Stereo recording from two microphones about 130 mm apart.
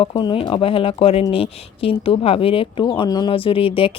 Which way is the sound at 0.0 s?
40° left (ahead or behind).